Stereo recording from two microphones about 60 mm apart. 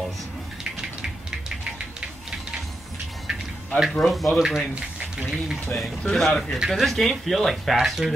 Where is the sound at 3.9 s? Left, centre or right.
Centre.